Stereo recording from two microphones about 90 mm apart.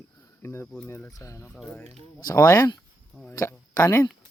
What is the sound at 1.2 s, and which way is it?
Speech, 35° left (ahead or behind).